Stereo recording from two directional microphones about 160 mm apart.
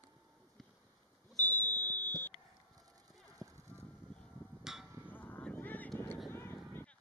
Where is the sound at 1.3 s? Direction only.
10° left (ahead or behind).